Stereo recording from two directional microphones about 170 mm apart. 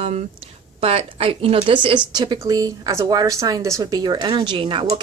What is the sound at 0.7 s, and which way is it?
A woman's voice, 35° right (ahead or behind).